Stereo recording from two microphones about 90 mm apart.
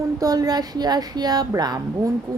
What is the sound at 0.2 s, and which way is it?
Speech, 45° right (ahead or behind).